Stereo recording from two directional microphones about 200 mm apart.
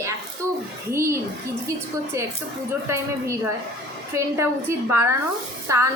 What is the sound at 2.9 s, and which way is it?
Speech, 15° right (ahead or behind).